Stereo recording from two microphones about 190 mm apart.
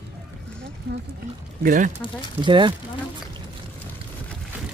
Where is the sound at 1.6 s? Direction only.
45° right (ahead or behind).